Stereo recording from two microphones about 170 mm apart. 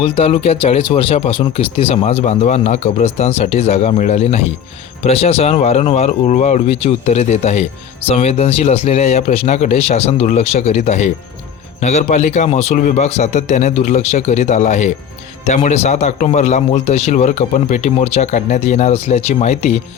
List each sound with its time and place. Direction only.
0.0 s speech: 35° left (ahead or behind)